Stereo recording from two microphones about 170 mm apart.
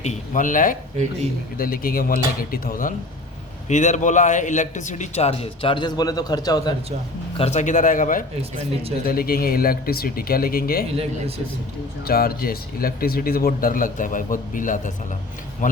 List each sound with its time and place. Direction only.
0.0 s speech: 45° left (ahead or behind)
3.7 s a man's voice: 45° left (ahead or behind); by 6.7 s 20° left (ahead or behind)
7.3 s speech: 40° left (ahead or behind); by 10.8 s 60° left (ahead or behind)
12.0 s speech: 60° left (ahead or behind)